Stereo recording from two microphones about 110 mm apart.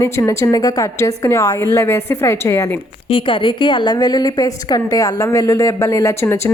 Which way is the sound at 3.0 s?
50° left (ahead or behind).